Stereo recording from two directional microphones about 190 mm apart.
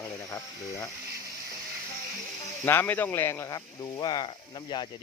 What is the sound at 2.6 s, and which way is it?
Speech, 10° left (ahead or behind).